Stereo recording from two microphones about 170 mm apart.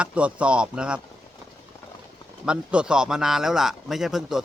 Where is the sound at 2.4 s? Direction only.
5° right (ahead or behind).